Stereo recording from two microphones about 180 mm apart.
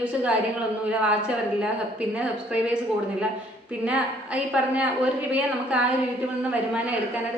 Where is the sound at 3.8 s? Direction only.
5° right (ahead or behind).